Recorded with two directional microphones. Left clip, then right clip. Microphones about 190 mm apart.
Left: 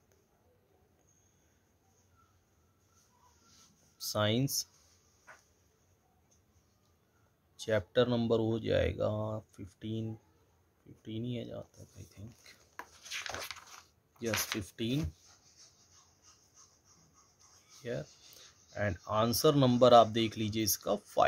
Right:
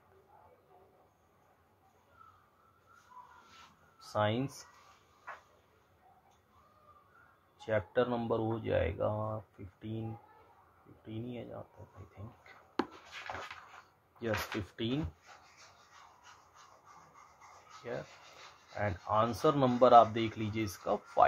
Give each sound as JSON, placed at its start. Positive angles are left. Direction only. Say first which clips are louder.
{"t": 4.1, "sound": "speech", "louder": "left 1 dB", "side_deg": 65}
{"t": 7.6, "sound": "speech", "louder": "left 2 dB", "side_deg": 65}
{"t": 11.1, "sound": "speech", "louder": "left 3 dB", "side_deg": 65}
{"t": 14.1, "sound": "speech", "louder": "left 1 dB", "side_deg": 40}
{"t": 17.9, "sound": "speech", "louder": "left 2 dB", "side_deg": 60}